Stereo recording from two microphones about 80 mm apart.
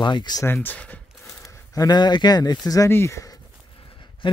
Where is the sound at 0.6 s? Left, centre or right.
Centre.